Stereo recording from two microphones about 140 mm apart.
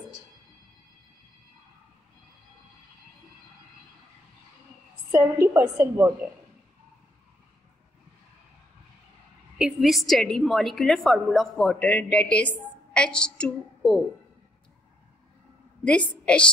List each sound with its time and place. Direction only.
5.1 s a woman's voice: 20° right (ahead or behind)
9.6 s a woman's voice: 5° right (ahead or behind)
15.8 s a woman's voice: 10° left (ahead or behind)